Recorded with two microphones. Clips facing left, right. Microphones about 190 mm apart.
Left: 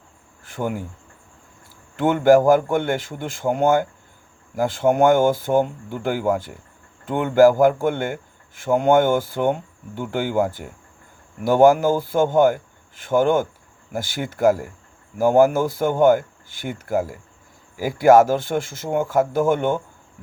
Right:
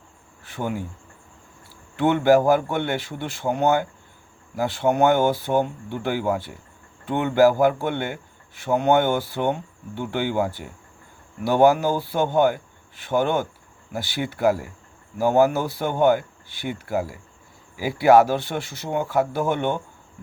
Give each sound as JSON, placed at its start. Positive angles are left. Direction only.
{"t": 0.4, "sound": "speech", "side_deg": 50}
{"t": 2.0, "sound": "a man's voice", "side_deg": 45}